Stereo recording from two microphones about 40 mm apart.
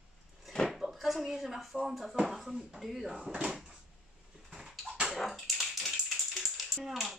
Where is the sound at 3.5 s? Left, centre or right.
Centre.